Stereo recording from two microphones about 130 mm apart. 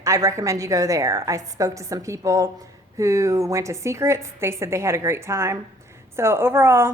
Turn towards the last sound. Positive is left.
turn(degrees=-20)  # may be behind; listen again after turning